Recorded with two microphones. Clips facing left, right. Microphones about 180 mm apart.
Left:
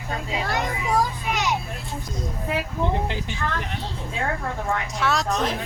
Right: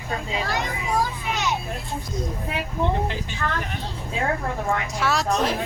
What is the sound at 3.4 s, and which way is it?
Speech, 10° left (ahead or behind).